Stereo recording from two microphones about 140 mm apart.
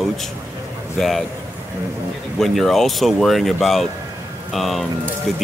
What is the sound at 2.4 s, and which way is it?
Speech, centre (ahead or behind).